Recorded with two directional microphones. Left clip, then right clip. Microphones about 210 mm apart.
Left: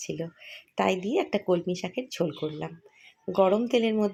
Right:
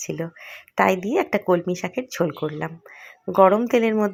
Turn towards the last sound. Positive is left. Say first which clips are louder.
# right 5 dB
turn(degrees=-15)  # may be behind; listen again after turning